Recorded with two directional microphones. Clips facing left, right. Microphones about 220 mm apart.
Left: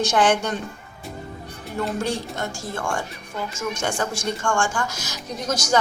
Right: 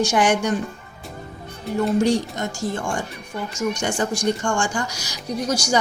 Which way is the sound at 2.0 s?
15° right (ahead or behind).